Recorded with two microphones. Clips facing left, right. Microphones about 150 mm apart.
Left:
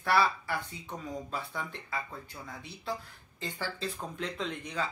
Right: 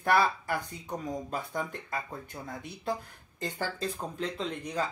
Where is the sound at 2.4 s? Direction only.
45° right (ahead or behind).